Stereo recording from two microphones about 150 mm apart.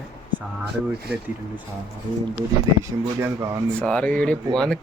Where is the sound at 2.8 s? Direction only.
20° right (ahead or behind).